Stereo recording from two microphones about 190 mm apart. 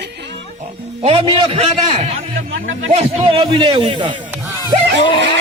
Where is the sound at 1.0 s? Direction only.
30° right (ahead or behind).